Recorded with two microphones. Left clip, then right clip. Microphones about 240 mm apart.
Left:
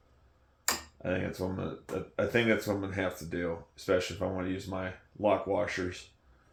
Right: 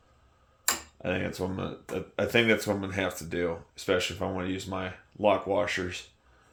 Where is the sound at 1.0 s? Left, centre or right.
Right.